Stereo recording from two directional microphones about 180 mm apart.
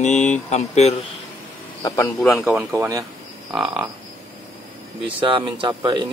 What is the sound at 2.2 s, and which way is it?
Speech, 5° left (ahead or behind).